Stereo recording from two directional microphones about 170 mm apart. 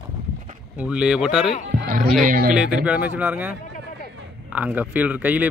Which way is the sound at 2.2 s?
55° right (ahead or behind).